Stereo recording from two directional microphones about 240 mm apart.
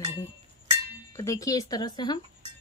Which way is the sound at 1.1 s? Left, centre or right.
Centre.